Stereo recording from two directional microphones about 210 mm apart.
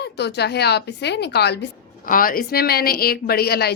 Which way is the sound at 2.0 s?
40° left (ahead or behind).